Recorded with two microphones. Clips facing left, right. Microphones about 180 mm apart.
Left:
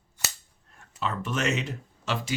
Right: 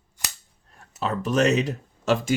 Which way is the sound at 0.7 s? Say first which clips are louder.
Right 4 dB; 40° right (ahead or behind).